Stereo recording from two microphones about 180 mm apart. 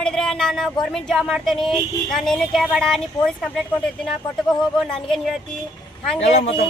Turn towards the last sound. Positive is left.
turn(degrees=35)  # may be behind; listen again after turning